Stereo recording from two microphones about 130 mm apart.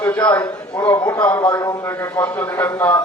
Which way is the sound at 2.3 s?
15° left (ahead or behind).